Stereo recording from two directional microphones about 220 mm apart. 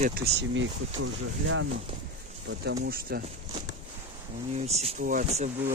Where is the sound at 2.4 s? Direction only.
50° right (ahead or behind).